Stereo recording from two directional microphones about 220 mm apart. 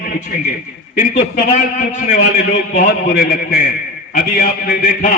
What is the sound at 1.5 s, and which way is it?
A man's voice, 35° left (ahead or behind).